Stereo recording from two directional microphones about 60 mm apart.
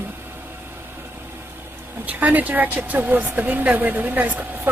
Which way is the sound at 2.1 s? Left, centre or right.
Right.